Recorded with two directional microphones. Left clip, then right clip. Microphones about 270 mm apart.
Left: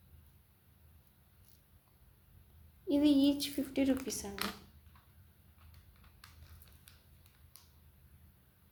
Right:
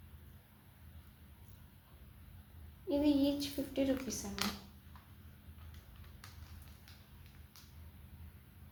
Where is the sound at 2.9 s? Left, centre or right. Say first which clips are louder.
Left 3 dB; left.